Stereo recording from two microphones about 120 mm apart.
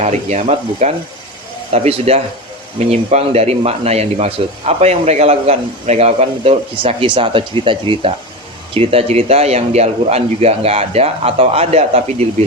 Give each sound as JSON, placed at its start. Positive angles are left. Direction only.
{"t": 0.0, "sound": "sizzle", "side_deg": -70}
{"t": 1.7, "sound": "speech", "side_deg": -60}
{"t": 6.8, "sound": "speech", "side_deg": -50}
{"t": 8.7, "sound": "speech", "side_deg": -55}